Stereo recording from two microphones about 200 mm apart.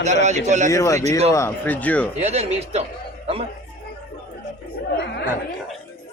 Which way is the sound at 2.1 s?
35° right (ahead or behind).